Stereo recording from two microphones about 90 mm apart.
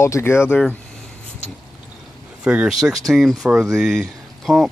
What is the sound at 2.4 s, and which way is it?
Speech, 15° right (ahead or behind).